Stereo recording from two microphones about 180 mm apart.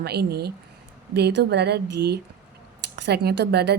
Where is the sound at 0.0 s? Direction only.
65° right (ahead or behind).